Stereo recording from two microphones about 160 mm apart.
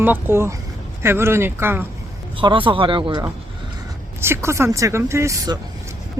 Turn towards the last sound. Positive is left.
turn(degrees=-20)  # may be behind; listen again after turning